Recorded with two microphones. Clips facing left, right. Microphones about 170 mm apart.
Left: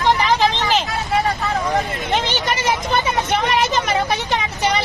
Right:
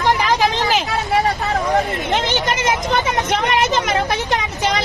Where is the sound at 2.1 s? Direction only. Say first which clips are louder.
Even; 15° right (ahead or behind).